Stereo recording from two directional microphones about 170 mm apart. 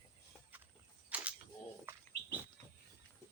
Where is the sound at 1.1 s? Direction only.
10° right (ahead or behind).